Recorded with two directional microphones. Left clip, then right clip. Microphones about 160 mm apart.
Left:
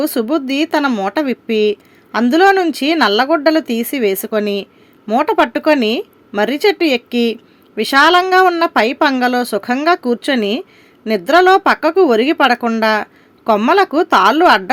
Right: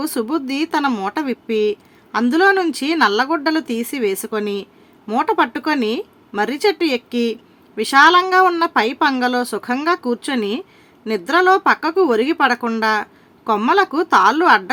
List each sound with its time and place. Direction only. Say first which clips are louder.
0.0 s speech: left 5 dB; 20° left (ahead or behind)